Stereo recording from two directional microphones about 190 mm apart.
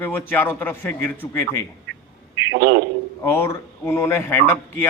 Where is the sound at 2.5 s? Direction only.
75° right (ahead or behind).